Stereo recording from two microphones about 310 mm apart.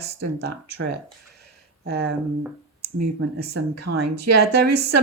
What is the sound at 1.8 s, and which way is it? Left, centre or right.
Speech, right.